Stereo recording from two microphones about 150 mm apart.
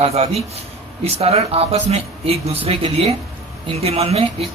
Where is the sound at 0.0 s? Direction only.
45° right (ahead or behind).